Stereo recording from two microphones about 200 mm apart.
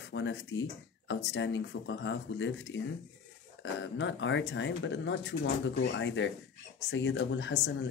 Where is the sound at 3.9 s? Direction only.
65° left (ahead or behind).